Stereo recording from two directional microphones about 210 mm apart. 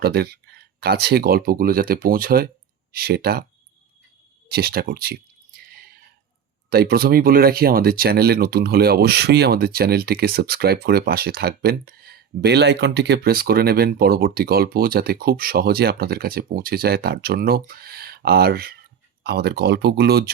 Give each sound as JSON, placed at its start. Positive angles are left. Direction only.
{"t": 0.0, "sound": "speech", "side_deg": -50}
{"t": 4.4, "sound": "speech", "side_deg": -45}
{"t": 5.5, "sound": "drip", "side_deg": -45}
{"t": 6.7, "sound": "speech", "side_deg": -45}